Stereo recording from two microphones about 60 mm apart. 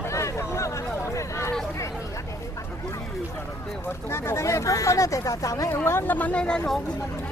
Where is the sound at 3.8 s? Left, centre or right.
Left.